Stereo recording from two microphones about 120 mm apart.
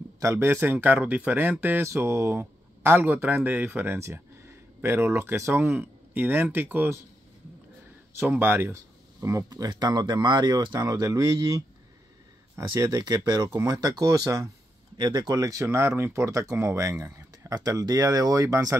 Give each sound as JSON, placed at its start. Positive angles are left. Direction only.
{"t": 0.2, "sound": "speech", "side_deg": -20}
{"t": 8.2, "sound": "speech", "side_deg": -15}
{"t": 17.0, "sound": "a sound", "side_deg": -25}
{"t": 17.6, "sound": "speech", "side_deg": -30}